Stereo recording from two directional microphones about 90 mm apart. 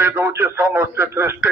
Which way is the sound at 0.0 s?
25° right (ahead or behind).